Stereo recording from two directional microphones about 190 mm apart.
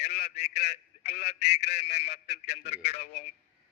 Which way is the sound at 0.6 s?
35° left (ahead or behind).